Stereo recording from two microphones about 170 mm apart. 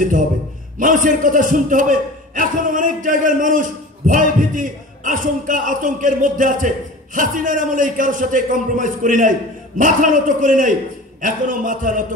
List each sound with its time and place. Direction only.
0.7 s a man's voice: 50° right (ahead or behind)